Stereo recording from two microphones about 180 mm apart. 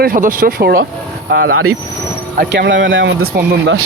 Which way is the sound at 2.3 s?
75° right (ahead or behind).